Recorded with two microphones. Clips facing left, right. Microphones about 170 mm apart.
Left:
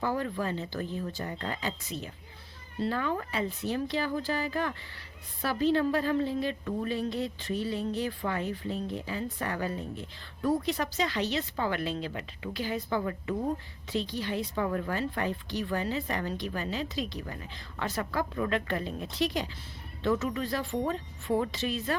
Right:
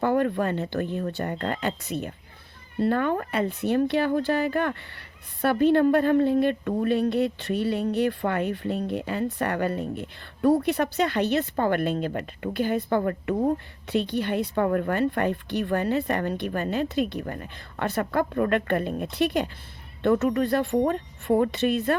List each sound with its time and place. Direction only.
0.0 s speech: 60° right (ahead or behind)